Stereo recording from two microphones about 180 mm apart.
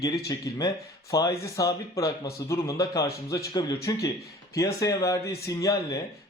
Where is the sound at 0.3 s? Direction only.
20° left (ahead or behind).